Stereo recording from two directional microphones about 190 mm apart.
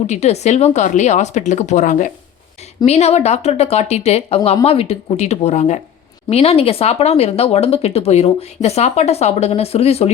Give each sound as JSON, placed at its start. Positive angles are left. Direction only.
{"t": 0.1, "sound": "speech", "side_deg": 35}